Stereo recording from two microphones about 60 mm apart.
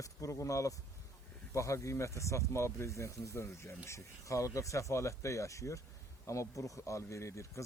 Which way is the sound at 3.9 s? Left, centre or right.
Left.